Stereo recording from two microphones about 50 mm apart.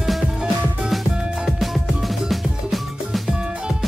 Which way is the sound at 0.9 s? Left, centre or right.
Centre.